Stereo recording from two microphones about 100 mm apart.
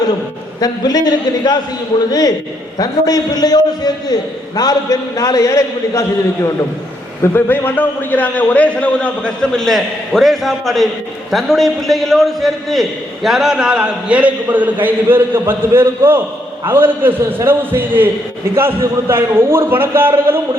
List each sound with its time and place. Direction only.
0.6 s a man's voice: 40° left (ahead or behind)
2.7 s a man's voice: 40° left (ahead or behind)
7.3 s a man's voice: 20° left (ahead or behind); by 20.4 s 20° right (ahead or behind)